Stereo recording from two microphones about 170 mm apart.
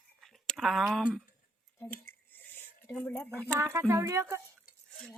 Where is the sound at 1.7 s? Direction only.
15° left (ahead or behind).